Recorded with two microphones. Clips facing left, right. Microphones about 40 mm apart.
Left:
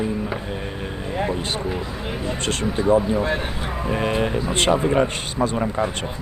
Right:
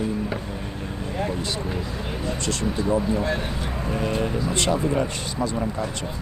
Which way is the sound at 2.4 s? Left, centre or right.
Left.